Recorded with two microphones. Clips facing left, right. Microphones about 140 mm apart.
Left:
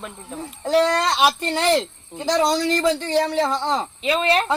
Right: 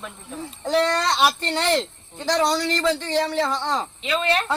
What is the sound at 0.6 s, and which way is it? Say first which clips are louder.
A man's voice: left 3 dB; 5° left (ahead or behind).